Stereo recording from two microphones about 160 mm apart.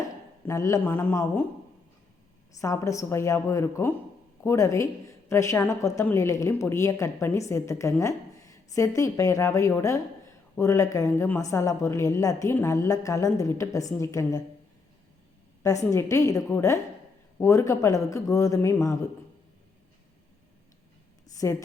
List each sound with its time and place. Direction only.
0.4 s a woman's voice: 20° left (ahead or behind)
2.6 s a woman's voice: 20° left (ahead or behind)
15.9 s a woman's voice: 20° left (ahead or behind)
21.4 s a woman's voice: 20° left (ahead or behind)